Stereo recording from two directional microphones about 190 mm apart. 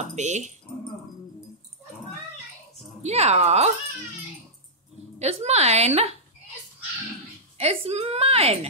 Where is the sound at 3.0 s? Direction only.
35° right (ahead or behind).